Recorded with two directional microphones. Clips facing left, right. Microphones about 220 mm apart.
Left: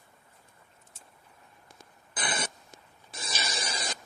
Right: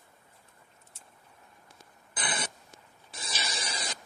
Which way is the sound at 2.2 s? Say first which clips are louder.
Left 2 dB; 45° left (ahead or behind).